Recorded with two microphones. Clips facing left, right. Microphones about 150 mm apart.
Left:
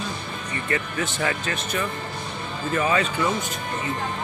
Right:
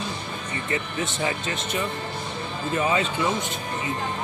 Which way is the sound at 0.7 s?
25° right (ahead or behind).